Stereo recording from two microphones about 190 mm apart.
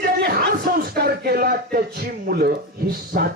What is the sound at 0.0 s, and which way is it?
Speech, 55° right (ahead or behind).